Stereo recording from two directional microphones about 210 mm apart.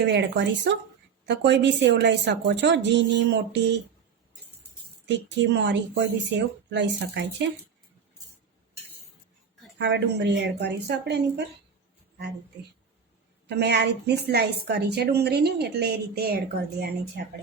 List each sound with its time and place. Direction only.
0.1 s a woman's voice: 55° right (ahead or behind)
5.0 s a woman's voice: 55° right (ahead or behind)
9.7 s a woman's voice: 55° right (ahead or behind)
13.5 s a woman's voice: 50° right (ahead or behind)